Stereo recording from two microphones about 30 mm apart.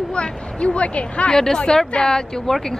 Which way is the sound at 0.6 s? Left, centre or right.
Left.